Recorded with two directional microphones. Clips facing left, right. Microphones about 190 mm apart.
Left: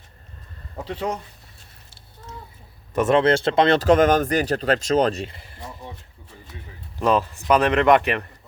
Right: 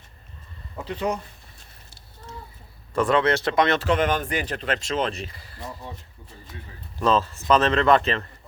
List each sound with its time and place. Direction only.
0.9 s speech: 30° left (ahead or behind)
2.9 s speech: 25° left (ahead or behind); by 5.3 s 40° left (ahead or behind)
5.3 s speech: 25° left (ahead or behind)
7.0 s speech: 15° left (ahead or behind)